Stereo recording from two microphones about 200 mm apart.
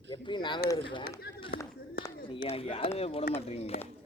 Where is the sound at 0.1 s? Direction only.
25° left (ahead or behind).